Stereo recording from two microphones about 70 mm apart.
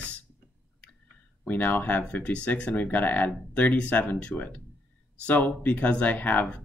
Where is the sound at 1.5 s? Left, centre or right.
Left.